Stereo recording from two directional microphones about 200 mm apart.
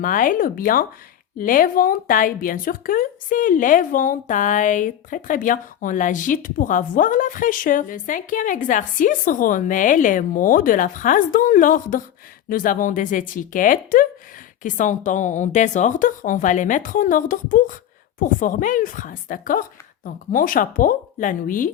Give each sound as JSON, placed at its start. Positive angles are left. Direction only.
{"t": 0.0, "sound": "a woman's voice", "side_deg": 40}